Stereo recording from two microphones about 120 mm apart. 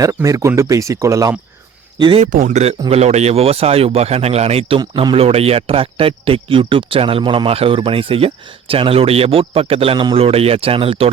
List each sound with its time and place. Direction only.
0.0 s speech: 25° right (ahead or behind)
2.0 s speech: 45° right (ahead or behind)
2.2 s speech: 75° right (ahead or behind)
2.9 s speech: 65° right (ahead or behind)